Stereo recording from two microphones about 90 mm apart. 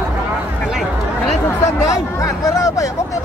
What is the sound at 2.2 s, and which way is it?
Speech, 35° left (ahead or behind).